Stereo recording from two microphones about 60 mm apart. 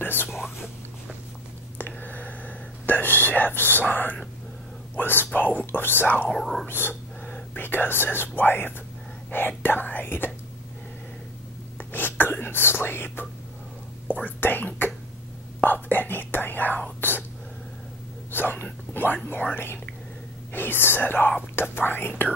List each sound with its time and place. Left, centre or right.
0.0 s whispering: left
0.4 s whispering: centre
1.8 s whispering: left
3.9 s speech: left
6.2 s speech: centre
7.3 s speech: left
11.8 s whispering: left
14.2 s speech: left
15.6 s whispering: left
18.3 s whispering: left
19.2 s speech: left